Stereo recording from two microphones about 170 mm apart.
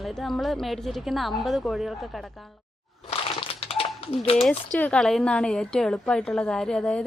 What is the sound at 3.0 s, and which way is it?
Crumpling, 35° left (ahead or behind).